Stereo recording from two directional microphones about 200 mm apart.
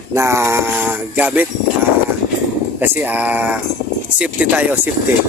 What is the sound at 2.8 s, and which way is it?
Speech, 10° right (ahead or behind).